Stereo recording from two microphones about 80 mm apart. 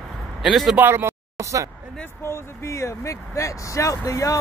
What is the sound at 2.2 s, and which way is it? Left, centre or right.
Speech, left.